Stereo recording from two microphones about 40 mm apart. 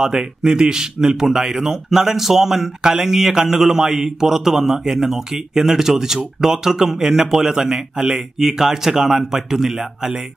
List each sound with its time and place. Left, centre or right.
0.0 s a man's voice: centre